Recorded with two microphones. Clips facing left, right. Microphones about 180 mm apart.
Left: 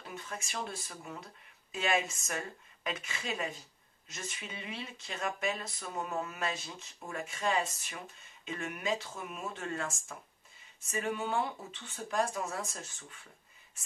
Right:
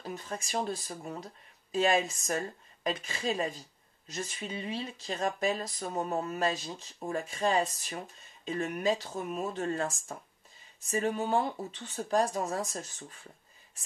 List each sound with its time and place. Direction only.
0.0 s speech: 35° right (ahead or behind)